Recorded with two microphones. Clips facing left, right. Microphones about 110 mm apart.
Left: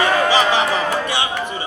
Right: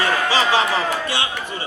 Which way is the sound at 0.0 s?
20° left (ahead or behind).